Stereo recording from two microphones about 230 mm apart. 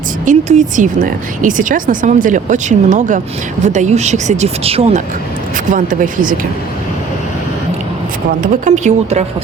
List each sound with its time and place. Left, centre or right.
0.3 s speech: right
8.4 s speech: right